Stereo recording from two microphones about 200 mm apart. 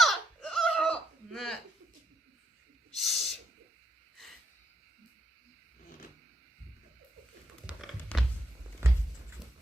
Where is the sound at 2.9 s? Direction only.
Centre (ahead or behind).